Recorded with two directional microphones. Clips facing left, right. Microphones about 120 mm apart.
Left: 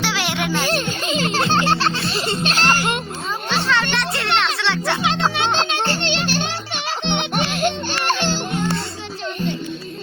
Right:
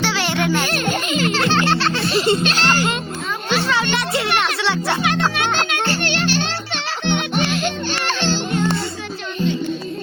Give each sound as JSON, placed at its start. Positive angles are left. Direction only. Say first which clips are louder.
{"t": 0.0, "sound": "music", "louder": "right 3 dB", "side_deg": 0}
{"t": 1.0, "sound": "music", "louder": "left 1 dB", "side_deg": 25}
{"t": 2.1, "sound": "music", "louder": "right 5 dB", "side_deg": 0}
{"t": 5.0, "sound": "music", "louder": "left 2 dB", "side_deg": 20}
{"t": 8.2, "sound": "music", "louder": "right 2 dB", "side_deg": 15}